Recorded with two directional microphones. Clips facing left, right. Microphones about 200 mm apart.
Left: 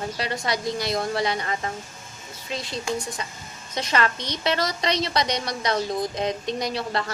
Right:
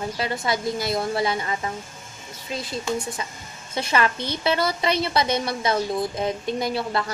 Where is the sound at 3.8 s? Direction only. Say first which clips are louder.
Right 2 dB; 5° right (ahead or behind).